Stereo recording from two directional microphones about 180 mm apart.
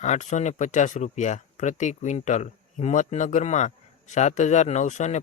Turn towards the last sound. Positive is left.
turn(degrees=40)  # may be behind; listen again after turning